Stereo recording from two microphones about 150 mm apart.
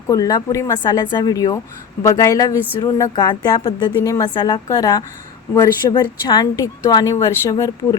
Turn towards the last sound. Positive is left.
turn(degrees=20)  # may be behind; listen again after turning